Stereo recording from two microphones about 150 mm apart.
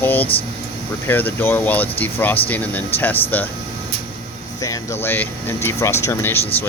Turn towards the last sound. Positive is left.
turn(degrees=15)  # may be behind; listen again after turning